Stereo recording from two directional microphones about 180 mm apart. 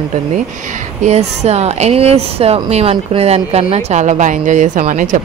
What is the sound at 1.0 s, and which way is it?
Speech, 40° right (ahead or behind).